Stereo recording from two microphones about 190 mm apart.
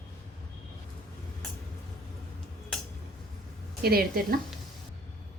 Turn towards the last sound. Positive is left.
turn(degrees=-50)  # may be behind; listen again after turning